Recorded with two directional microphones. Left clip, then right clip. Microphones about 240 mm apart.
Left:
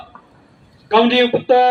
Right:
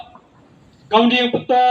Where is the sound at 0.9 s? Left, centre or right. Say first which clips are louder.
Left 2 dB; left.